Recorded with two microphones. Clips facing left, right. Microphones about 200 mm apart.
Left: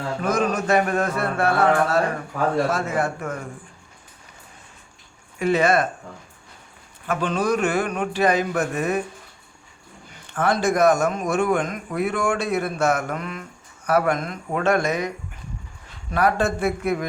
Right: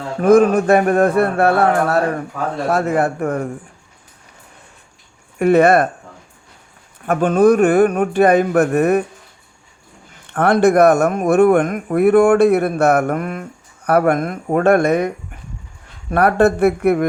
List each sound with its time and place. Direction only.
0.2 s speech: 55° right (ahead or behind)
5.4 s speech: 60° right (ahead or behind)
7.0 s speech: 50° right (ahead or behind)
10.3 s speech: 60° right (ahead or behind)